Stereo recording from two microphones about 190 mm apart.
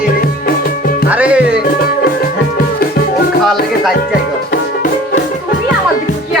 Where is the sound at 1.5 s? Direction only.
55° left (ahead or behind).